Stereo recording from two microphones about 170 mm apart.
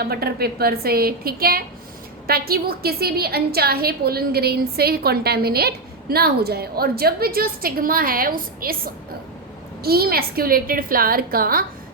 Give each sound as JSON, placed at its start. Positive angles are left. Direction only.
{"t": 0.0, "sound": "a woman's voice", "side_deg": -65}